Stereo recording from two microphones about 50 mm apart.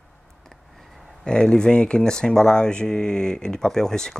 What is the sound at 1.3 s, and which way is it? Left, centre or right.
Speech, centre.